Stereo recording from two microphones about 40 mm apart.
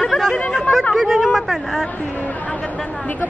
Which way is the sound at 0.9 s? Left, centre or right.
Centre.